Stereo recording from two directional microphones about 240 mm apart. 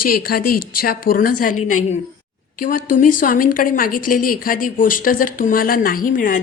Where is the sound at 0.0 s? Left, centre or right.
Left.